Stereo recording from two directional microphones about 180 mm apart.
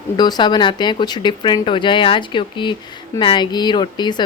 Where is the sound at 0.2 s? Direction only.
25° left (ahead or behind).